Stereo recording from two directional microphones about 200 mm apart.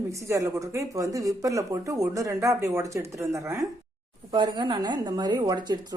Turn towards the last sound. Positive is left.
turn(degrees=-20)  # may be behind; listen again after turning